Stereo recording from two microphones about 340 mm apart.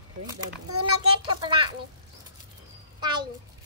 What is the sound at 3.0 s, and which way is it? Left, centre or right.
Speech, centre.